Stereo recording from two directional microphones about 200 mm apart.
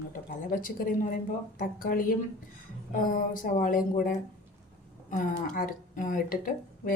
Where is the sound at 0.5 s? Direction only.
45° left (ahead or behind).